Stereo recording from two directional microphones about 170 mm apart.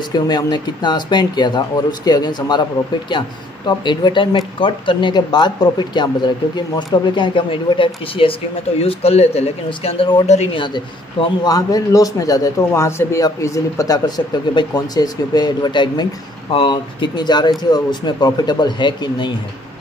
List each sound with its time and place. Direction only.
0.1 s a man's voice: 25° left (ahead or behind)
10.2 s speech: 40° left (ahead or behind)
10.6 s a man's voice: 25° left (ahead or behind)